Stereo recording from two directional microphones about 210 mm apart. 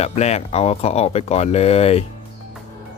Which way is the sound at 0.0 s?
30° left (ahead or behind).